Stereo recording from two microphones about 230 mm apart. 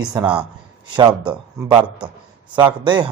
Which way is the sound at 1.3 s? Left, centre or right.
Centre.